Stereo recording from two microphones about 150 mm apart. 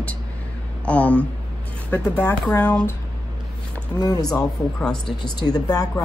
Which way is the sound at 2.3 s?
10° left (ahead or behind).